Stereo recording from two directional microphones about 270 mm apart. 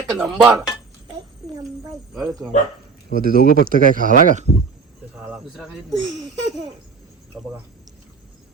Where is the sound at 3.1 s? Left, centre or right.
Right.